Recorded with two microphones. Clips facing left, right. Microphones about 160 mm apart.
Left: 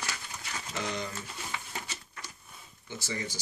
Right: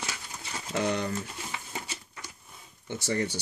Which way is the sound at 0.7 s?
60° right (ahead or behind).